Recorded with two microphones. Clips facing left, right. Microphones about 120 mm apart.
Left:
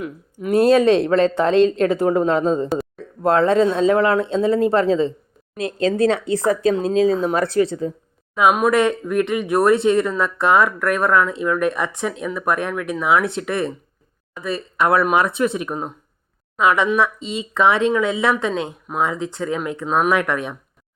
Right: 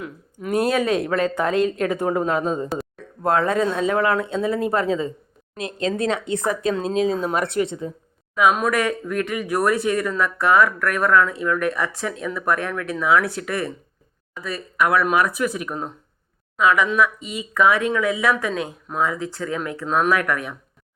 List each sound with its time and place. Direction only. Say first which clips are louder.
0.7 s speech: left 7 dB; 30° left (ahead or behind)
1.9 s a woman's voice: left 4 dB; 20° right (ahead or behind)
2.1 s speech: left 4 dB; 30° left (ahead or behind)